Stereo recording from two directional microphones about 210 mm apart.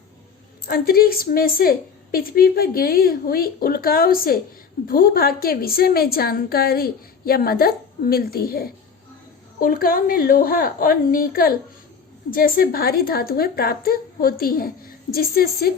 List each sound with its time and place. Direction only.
0.6 s a woman's voice: 45° left (ahead or behind)